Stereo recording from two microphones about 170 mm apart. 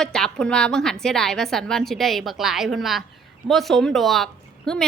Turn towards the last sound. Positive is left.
turn(degrees=5)  # may be behind; listen again after turning